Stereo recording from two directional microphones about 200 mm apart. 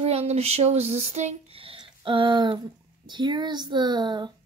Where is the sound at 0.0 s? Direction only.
30° right (ahead or behind).